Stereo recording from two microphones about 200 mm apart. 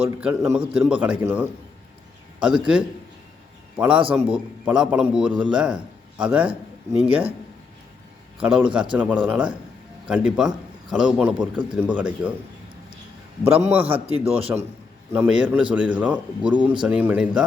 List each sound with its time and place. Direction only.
0.2 s a man's voice: 5° right (ahead or behind)
8.4 s a man's voice: 5° right (ahead or behind)
13.8 s a man's voice: 30° right (ahead or behind)
15.1 s a man's voice: 5° right (ahead or behind)